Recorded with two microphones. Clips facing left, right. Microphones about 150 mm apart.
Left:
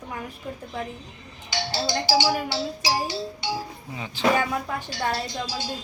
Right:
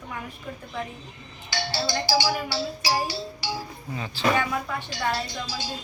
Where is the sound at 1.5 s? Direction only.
20° left (ahead or behind).